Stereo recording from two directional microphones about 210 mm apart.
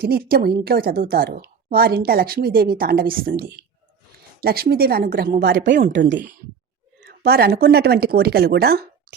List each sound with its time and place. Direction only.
0.0 s a woman's voice: 45° right (ahead or behind)
5.5 s speech: 60° right (ahead or behind)